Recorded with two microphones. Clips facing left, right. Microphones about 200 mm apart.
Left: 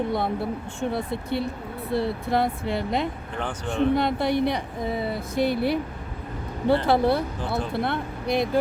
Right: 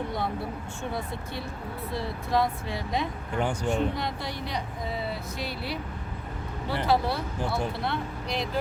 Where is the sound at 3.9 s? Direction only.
60° left (ahead or behind).